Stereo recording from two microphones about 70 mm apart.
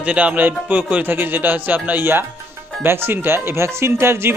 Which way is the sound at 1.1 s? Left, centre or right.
Right.